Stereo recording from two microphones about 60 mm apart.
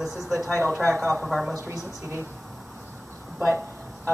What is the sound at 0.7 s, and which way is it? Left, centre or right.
Speech, right.